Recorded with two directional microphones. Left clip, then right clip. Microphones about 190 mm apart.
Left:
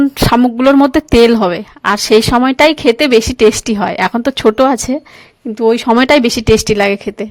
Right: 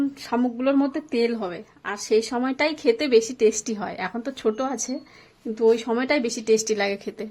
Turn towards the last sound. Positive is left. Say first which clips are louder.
# left 13 dB
turn(degrees=40)  # may be behind; listen again after turning